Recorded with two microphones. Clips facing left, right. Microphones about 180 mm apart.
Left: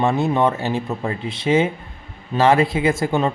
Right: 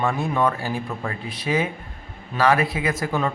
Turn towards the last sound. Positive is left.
turn(degrees=25)  # may be behind; listen again after turning